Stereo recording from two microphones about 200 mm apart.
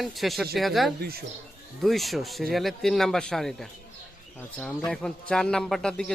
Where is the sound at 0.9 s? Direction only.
50° right (ahead or behind).